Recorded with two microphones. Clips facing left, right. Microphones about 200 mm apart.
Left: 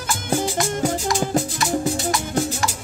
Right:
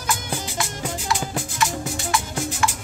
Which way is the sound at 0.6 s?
45° left (ahead or behind).